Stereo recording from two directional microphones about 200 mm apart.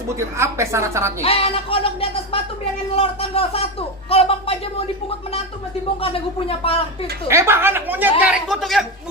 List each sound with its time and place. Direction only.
0.2 s a woman's voice: 15° right (ahead or behind)
1.2 s speech: 30° left (ahead or behind)
6.0 s speech: 30° left (ahead or behind)
7.3 s a woman's voice: 15° right (ahead or behind)